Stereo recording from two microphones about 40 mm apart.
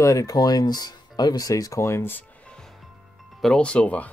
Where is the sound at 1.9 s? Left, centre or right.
Left.